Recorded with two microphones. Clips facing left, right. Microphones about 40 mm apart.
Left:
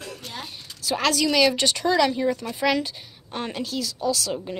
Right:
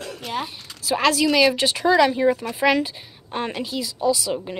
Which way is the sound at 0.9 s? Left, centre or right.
Centre.